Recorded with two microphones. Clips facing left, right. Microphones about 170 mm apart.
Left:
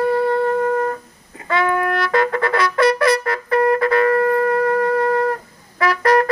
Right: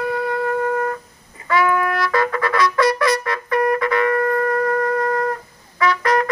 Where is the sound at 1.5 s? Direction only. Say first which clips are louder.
Even; 25° left (ahead or behind).